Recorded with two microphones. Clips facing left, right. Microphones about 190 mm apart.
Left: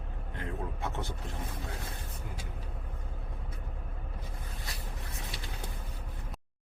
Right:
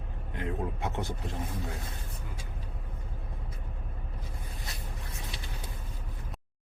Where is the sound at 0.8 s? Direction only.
15° right (ahead or behind).